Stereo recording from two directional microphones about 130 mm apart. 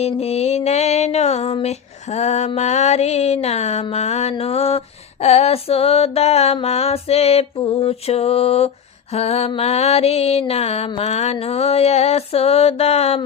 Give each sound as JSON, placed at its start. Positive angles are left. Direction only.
{"t": 0.0, "sound": "music", "side_deg": 55}
{"t": 3.9, "sound": "mantra", "side_deg": 55}